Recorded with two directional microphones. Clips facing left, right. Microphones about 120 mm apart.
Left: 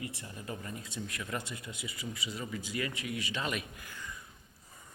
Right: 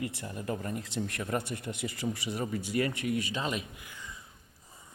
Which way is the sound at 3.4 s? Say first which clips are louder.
Right 2 dB; 25° right (ahead or behind).